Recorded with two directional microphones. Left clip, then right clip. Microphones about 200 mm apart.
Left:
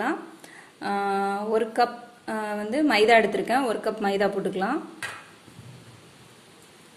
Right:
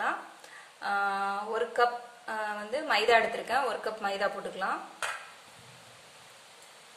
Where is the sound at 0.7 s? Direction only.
30° left (ahead or behind).